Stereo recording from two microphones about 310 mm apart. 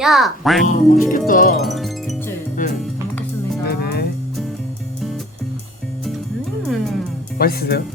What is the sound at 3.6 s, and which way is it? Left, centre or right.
Music, left.